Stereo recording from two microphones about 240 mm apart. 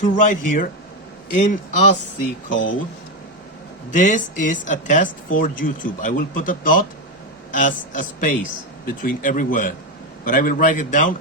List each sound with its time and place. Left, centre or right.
0.0 s speech: left
2.5 s speech: left
3.9 s speech: left